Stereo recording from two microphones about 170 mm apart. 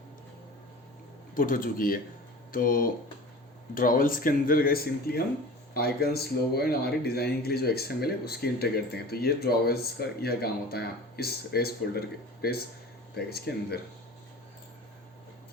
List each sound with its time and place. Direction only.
1.4 s speech: 55° left (ahead or behind)